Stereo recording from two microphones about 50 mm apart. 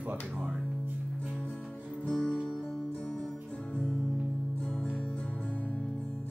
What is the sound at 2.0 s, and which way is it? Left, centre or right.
Music, centre.